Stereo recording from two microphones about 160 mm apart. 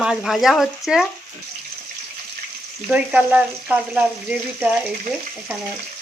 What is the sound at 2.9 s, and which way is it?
Speech, 10° right (ahead or behind).